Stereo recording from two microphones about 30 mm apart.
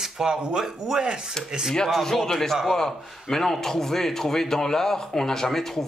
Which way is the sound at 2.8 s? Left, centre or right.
Centre.